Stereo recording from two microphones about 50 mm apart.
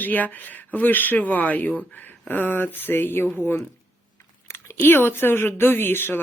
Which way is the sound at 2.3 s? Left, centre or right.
Left.